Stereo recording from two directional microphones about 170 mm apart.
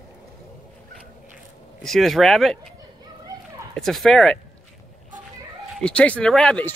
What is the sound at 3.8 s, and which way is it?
Speech, centre (ahead or behind).